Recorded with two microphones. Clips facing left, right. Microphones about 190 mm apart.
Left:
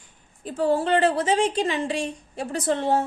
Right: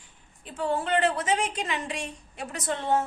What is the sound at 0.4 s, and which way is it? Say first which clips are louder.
A woman's voice: left 6 dB; 35° left (ahead or behind).